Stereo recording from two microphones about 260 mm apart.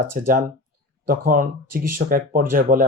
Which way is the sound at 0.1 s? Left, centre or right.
Right.